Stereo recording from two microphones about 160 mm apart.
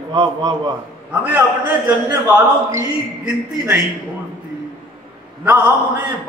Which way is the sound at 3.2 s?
5° right (ahead or behind).